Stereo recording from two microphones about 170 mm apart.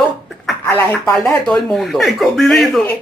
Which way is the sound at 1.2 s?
5° left (ahead or behind).